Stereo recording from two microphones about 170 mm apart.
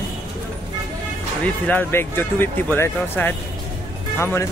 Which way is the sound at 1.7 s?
10° left (ahead or behind).